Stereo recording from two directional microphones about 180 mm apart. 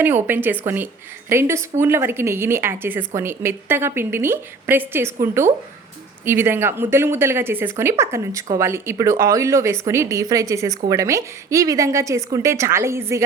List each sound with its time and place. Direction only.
0.0 s a woman's voice: 10° right (ahead or behind)